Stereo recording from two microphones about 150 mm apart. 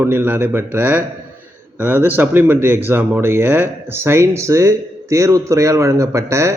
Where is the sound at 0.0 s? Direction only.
15° right (ahead or behind).